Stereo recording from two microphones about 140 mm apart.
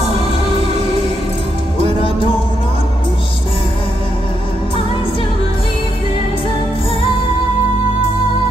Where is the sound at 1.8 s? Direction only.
40° left (ahead or behind).